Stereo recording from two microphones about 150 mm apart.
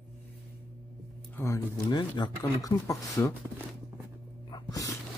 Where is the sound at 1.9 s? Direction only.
30° left (ahead or behind).